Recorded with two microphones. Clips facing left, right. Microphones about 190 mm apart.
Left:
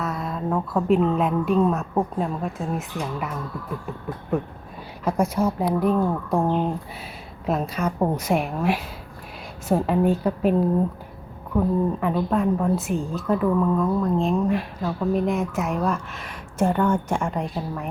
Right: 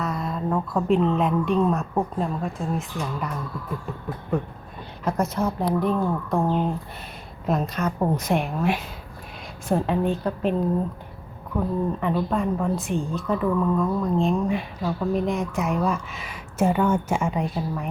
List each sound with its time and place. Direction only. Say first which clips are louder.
0.0 s a woman's voice: even; centre (ahead or behind)